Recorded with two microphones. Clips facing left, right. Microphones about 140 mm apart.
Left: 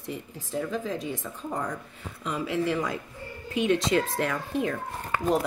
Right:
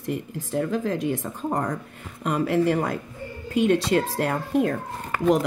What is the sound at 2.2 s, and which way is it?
Speech, 55° right (ahead or behind).